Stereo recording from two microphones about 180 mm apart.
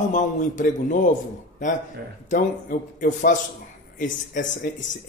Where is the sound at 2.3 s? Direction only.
45° left (ahead or behind).